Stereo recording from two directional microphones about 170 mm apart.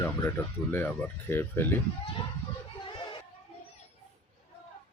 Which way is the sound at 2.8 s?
30° left (ahead or behind).